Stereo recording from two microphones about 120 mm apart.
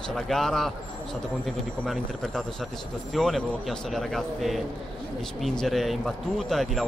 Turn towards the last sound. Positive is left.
turn(degrees=0)  # may be behind; listen again after turning